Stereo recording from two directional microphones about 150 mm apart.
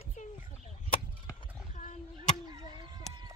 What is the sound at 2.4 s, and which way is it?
Fowl, 30° right (ahead or behind).